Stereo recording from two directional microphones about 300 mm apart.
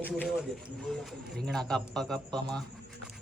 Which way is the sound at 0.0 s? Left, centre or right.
Centre.